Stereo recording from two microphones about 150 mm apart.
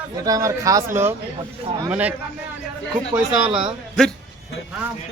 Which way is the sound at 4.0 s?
5° left (ahead or behind).